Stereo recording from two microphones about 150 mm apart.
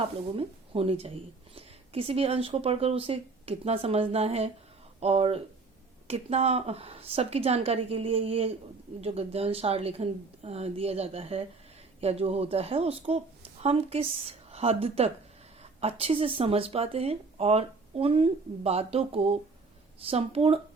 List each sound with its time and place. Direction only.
0.3 s speech: 40° right (ahead or behind)